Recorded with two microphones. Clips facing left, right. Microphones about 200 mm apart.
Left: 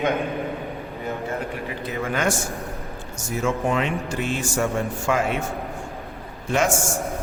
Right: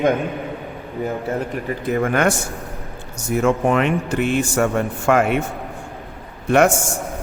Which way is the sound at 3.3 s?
60° right (ahead or behind).